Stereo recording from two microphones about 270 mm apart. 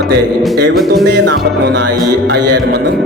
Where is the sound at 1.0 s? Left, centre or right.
Right.